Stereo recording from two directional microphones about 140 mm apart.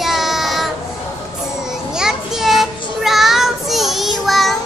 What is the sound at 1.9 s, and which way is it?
Child singing, 5° right (ahead or behind).